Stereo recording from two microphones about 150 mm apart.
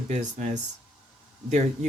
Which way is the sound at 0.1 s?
55° right (ahead or behind).